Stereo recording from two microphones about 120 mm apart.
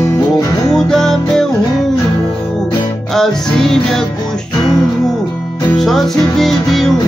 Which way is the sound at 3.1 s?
5° left (ahead or behind).